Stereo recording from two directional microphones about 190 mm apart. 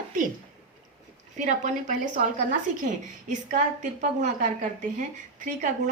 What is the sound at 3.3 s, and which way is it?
A woman's voice, 40° right (ahead or behind).